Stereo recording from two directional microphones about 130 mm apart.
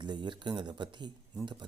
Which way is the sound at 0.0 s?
35° right (ahead or behind).